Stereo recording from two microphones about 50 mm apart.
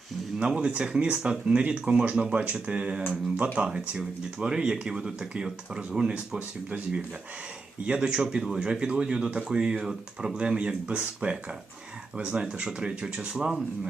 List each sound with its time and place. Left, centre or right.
0.3 s speech: right
6.7 s speech: right
7.9 s speech: centre